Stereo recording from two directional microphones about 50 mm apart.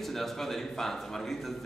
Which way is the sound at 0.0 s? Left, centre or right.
Centre.